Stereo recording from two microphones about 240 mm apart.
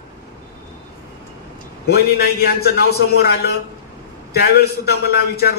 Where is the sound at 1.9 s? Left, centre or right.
Left.